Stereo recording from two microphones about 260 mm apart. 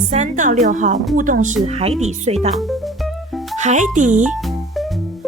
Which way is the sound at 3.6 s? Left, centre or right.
Right.